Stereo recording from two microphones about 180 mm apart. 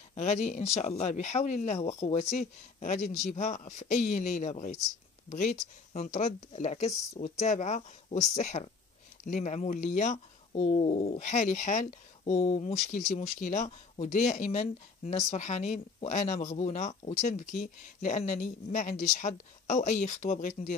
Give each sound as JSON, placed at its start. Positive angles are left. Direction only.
{"t": 0.1, "sound": "speech", "side_deg": 40}